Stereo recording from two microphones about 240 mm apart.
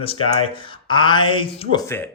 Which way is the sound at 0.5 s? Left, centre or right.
Centre.